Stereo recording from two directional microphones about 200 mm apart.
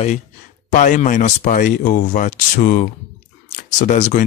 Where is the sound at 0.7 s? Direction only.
40° left (ahead or behind).